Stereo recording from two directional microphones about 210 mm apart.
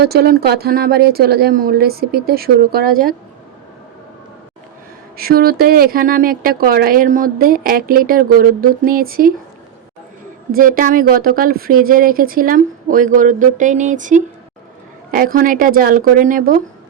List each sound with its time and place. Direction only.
0.0 s speech: 50° right (ahead or behind)
5.1 s speech: 45° right (ahead or behind)
10.5 s speech: 40° right (ahead or behind)